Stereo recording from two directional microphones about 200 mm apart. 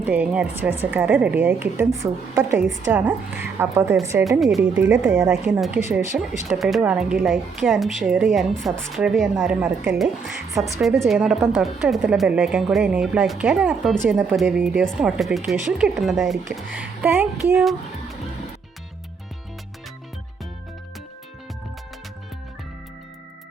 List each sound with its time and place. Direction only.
0.0 s a woman's voice: 5° right (ahead or behind)